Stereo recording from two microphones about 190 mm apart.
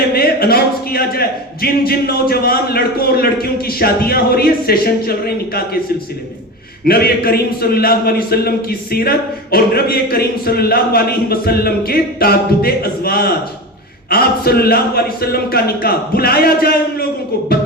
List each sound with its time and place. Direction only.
0.1 s a man's voice: 55° left (ahead or behind)
6.8 s a man's voice: 55° left (ahead or behind)